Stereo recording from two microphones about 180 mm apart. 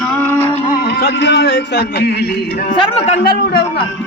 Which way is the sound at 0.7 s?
65° left (ahead or behind).